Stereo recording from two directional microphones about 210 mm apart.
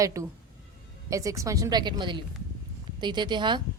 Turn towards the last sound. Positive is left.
turn(degrees=-20)  # may be behind; listen again after turning